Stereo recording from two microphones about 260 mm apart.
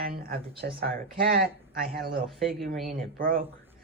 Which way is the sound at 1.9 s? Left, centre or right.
Right.